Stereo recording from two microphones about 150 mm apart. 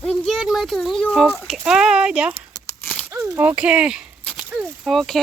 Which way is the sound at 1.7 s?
5° right (ahead or behind).